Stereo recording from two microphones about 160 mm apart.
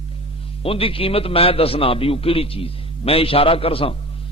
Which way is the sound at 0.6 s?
35° left (ahead or behind).